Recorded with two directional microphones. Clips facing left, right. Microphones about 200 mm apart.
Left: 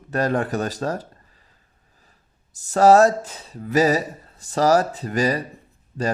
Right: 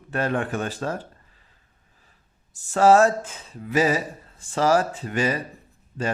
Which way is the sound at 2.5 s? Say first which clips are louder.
Left 2 dB; 40° left (ahead or behind).